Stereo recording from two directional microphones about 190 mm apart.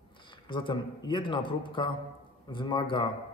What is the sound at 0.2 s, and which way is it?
A man's voice, 25° left (ahead or behind).